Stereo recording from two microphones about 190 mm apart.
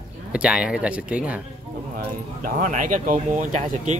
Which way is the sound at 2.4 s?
40° right (ahead or behind).